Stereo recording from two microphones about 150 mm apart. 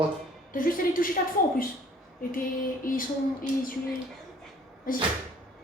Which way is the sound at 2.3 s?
65° left (ahead or behind).